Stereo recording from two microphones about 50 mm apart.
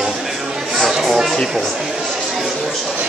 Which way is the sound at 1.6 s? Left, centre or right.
Centre.